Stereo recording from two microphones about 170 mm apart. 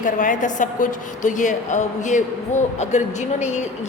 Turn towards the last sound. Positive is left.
turn(degrees=45)  # may be behind; listen again after turning